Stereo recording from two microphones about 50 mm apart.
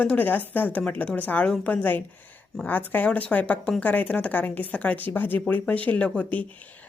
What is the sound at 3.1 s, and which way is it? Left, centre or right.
Speech, left.